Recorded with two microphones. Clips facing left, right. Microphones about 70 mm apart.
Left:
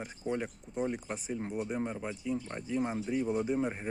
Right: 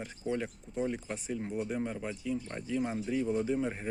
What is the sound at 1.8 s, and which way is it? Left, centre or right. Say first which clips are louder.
Speech: even; left.